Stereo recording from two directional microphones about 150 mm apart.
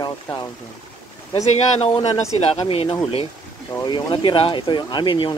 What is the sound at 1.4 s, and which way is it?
Speech, 45° left (ahead or behind).